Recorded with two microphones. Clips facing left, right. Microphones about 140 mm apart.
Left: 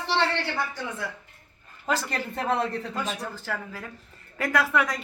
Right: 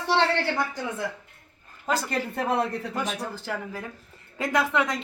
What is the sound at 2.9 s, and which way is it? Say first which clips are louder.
A woman's voice: right 1 dB; 20° right (ahead or behind).